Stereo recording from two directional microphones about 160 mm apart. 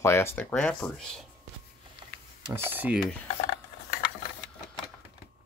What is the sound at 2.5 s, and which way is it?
Speech, 10° right (ahead or behind).